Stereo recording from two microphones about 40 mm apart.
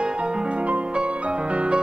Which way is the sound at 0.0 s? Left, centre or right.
Right.